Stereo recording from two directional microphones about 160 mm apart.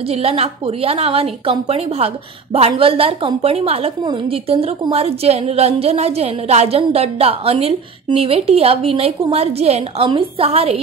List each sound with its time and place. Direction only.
0.0 s a woman's voice: 40° right (ahead or behind)